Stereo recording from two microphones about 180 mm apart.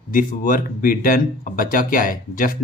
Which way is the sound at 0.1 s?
50° left (ahead or behind).